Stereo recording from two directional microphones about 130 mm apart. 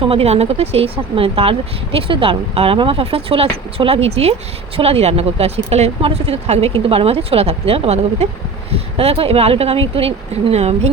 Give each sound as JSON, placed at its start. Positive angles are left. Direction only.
{"t": 0.0, "sound": "speech", "side_deg": -45}